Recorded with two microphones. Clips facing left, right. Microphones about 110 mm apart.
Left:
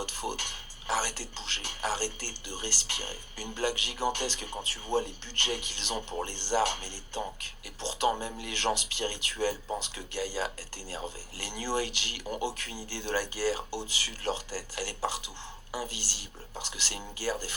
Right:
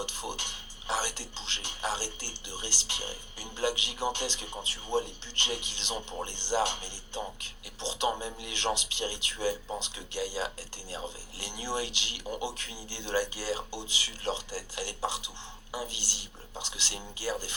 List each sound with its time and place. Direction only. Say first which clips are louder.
0.0 s speech: left 2 dB; 25° right (ahead or behind)